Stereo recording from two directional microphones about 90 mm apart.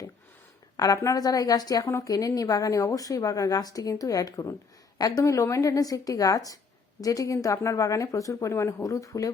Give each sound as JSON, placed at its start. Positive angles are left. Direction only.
{"t": 0.8, "sound": "a woman's voice", "side_deg": 40}